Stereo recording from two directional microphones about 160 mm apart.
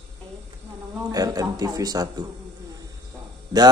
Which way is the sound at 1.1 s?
25° right (ahead or behind).